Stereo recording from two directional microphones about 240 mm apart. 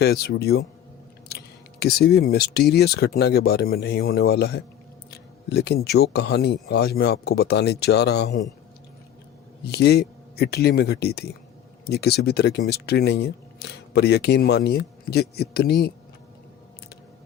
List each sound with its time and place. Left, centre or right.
0.0 s speech: left
1.3 s chewing: left
1.8 s speech: left
9.7 s speech: left